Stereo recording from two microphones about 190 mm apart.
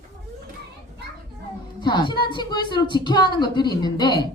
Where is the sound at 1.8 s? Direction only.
25° left (ahead or behind).